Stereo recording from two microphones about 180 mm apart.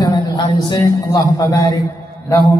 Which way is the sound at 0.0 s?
20° left (ahead or behind).